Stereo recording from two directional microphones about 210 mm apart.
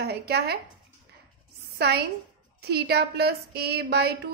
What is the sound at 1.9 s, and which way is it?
A woman's voice, 50° right (ahead or behind).